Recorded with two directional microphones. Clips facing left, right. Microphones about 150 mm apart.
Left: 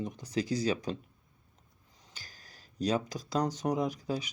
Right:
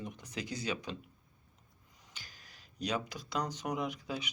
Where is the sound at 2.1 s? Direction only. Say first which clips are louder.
Left 2 dB; 40° left (ahead or behind).